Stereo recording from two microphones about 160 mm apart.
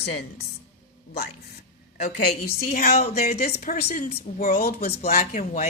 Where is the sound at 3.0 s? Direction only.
40° left (ahead or behind).